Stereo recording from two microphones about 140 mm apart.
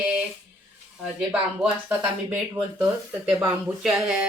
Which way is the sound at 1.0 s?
10° right (ahead or behind).